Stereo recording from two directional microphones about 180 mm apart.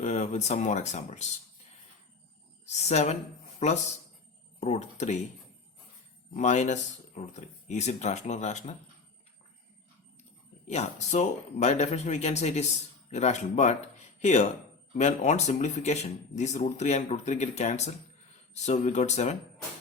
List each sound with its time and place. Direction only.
0.0 s speech: 40° left (ahead or behind)
2.9 s speech: 40° left (ahead or behind)
4.6 s speech: 40° left (ahead or behind)
6.3 s speech: 40° left (ahead or behind)
10.7 s speech: 40° left (ahead or behind)